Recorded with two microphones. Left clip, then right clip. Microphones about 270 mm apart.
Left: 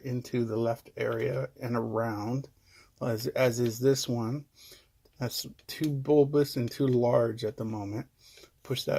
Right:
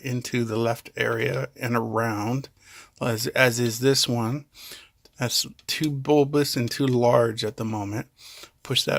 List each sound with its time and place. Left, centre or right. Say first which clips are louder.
0.0 s speech: right 4 dB; right